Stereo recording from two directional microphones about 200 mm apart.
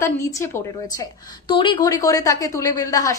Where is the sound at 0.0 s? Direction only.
15° left (ahead or behind).